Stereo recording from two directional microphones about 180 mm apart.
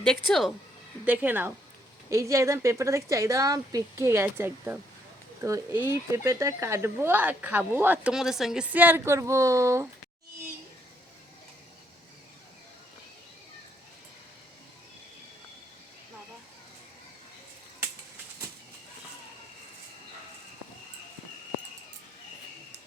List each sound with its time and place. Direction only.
0.0 s speech: 5° left (ahead or behind)
1.0 s speech: 10° right (ahead or behind)